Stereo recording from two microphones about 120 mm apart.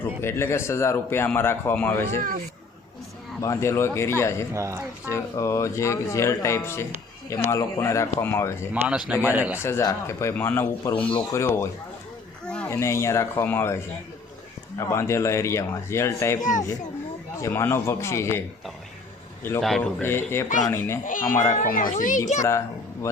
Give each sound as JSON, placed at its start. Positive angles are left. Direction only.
{"t": 0.0, "sound": "a man's voice", "side_deg": 20}
{"t": 3.4, "sound": "a man's voice", "side_deg": 25}
{"t": 4.5, "sound": "speech", "side_deg": -25}
{"t": 5.0, "sound": "a man's voice", "side_deg": 25}
{"t": 8.7, "sound": "a man's voice", "side_deg": -10}
{"t": 9.6, "sound": "a man's voice", "side_deg": 20}
{"t": 11.3, "sound": "a man's voice", "side_deg": 20}
{"t": 14.8, "sound": "a man's voice", "side_deg": 25}
{"t": 16.4, "sound": "a child's voice", "side_deg": 90}
{"t": 17.4, "sound": "a man's voice", "side_deg": 20}
{"t": 19.6, "sound": "speech", "side_deg": 0}
{"t": 20.0, "sound": "a man's voice", "side_deg": 20}
{"t": 21.0, "sound": "a child's voice", "side_deg": 90}